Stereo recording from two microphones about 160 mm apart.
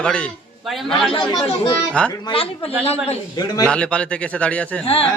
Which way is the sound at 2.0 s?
5° left (ahead or behind).